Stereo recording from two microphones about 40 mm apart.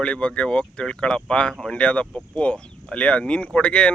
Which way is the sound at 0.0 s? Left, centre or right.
Left.